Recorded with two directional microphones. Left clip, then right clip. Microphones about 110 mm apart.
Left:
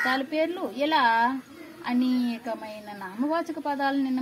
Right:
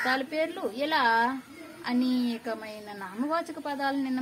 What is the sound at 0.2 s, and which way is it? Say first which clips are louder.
A woman's voice: left 3 dB; 20° right (ahead or behind).